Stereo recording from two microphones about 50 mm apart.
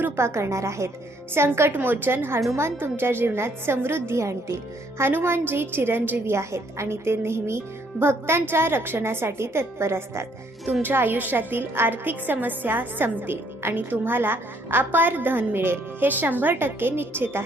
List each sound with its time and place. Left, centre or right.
0.2 s a woman's voice: right
1.3 s a woman's voice: right
5.1 s a woman's voice: right
6.3 s speech: right
10.8 s a woman's voice: right